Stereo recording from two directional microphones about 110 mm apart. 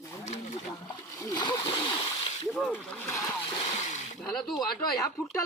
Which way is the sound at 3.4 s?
75° left (ahead or behind).